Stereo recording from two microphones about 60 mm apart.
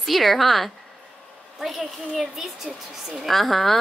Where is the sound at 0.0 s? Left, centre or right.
Centre.